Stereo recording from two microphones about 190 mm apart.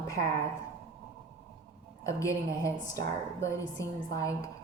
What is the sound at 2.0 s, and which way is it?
A woman's voice, 15° left (ahead or behind).